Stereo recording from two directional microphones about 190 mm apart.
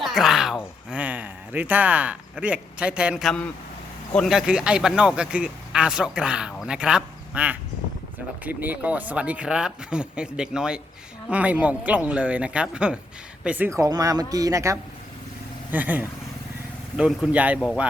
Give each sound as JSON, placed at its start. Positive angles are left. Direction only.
{"t": 0.0, "sound": "speech", "side_deg": 0}